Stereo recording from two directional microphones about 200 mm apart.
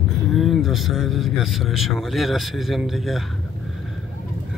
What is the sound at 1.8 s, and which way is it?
Speech, centre (ahead or behind).